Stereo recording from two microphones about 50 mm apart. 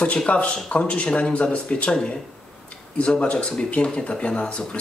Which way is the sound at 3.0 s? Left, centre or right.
Left.